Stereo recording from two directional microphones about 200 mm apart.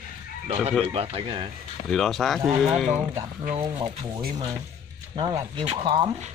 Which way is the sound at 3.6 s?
25° right (ahead or behind).